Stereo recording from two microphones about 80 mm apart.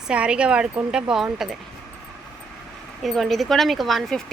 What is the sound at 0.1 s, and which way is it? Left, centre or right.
Speech, centre.